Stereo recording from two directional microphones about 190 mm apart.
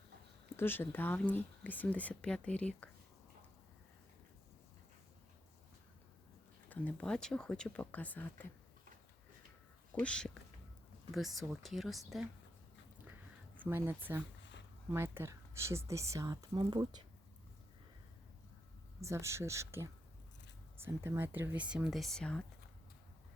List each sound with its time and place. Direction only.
0.5 s speech: 10° left (ahead or behind)
6.7 s speech: 5° left (ahead or behind)
9.9 s speech: 5° left (ahead or behind)
13.6 s speech: 10° right (ahead or behind)
18.9 s speech: 15° right (ahead or behind); by 22.4 s 5° left (ahead or behind)